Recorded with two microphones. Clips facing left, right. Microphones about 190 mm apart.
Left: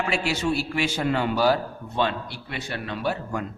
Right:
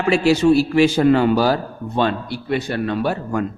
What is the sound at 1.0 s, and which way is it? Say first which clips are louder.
A man's voice: right 9 dB; 45° right (ahead or behind).